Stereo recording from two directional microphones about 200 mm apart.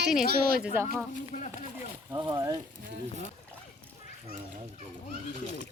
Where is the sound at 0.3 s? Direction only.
50° right (ahead or behind).